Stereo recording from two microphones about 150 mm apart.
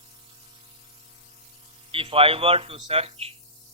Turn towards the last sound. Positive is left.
turn(degrees=-40)  # may be behind; listen again after turning